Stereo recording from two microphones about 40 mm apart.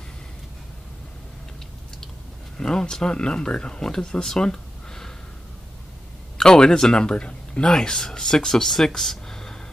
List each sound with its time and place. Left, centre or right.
2.5 s speech: centre
6.3 s speech: centre
7.6 s speech: centre